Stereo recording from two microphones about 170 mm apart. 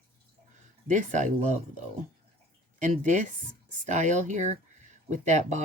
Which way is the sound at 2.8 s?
45° right (ahead or behind).